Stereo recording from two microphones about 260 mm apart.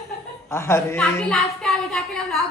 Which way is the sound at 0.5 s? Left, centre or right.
Centre.